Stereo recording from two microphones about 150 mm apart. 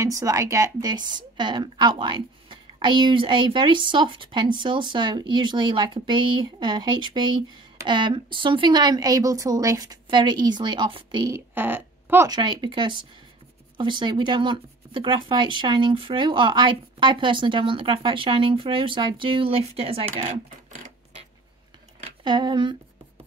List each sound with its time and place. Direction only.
0.0 s a woman's voice: 20° right (ahead or behind)
11.3 s speech: 15° right (ahead or behind)
12.3 s a woman's voice: 30° right (ahead or behind)
22.0 s speech: 30° right (ahead or behind)